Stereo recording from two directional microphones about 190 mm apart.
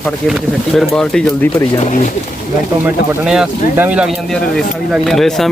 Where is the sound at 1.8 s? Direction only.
40° left (ahead or behind).